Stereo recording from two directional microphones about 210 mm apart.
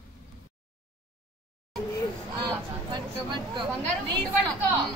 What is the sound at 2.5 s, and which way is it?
Chatter, 20° right (ahead or behind).